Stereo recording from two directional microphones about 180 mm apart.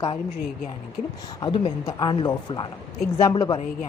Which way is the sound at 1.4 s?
30° left (ahead or behind).